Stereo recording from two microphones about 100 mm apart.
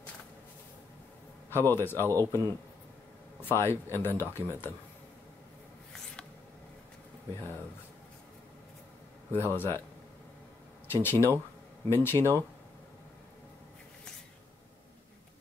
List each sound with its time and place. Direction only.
1.5 s speech: 25° left (ahead or behind)
2.0 s a man's voice: 35° right (ahead or behind)
3.4 s speech: 25° left (ahead or behind)
9.3 s speech: 20° left (ahead or behind)
10.9 s speech: 25° left (ahead or behind)